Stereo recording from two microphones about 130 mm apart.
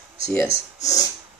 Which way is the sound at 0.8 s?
30° left (ahead or behind).